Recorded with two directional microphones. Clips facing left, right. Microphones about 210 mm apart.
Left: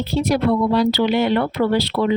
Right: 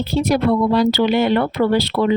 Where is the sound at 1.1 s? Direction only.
50° right (ahead or behind).